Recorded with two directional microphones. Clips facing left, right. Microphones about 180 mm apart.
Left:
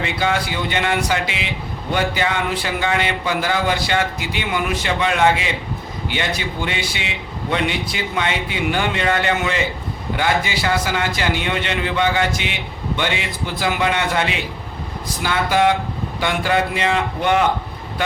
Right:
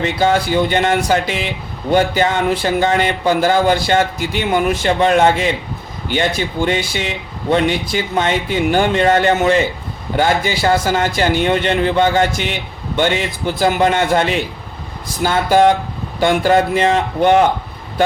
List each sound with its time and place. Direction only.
0.0 s a man's voice: 40° right (ahead or behind)